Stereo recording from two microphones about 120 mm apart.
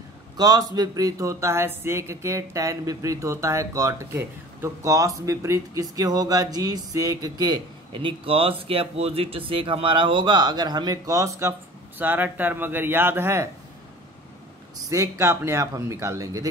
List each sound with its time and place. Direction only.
0.4 s speech: 35° right (ahead or behind)
14.9 s speech: 25° right (ahead or behind)